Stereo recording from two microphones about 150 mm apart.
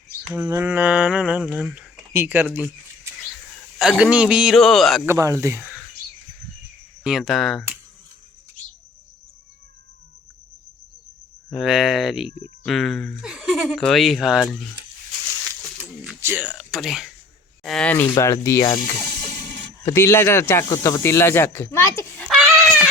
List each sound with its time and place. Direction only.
0.3 s a sound: 15° right (ahead or behind)
1.7 s speech: 10° right (ahead or behind)
5.0 s speech: 20° right (ahead or behind)
7.0 s speech: 5° right (ahead or behind)
11.5 s speech: centre (ahead or behind)
16.2 s speech: 10° right (ahead or behind); by 18.8 s 20° left (ahead or behind)
19.8 s speech: 20° left (ahead or behind)
22.3 s a sound: centre (ahead or behind)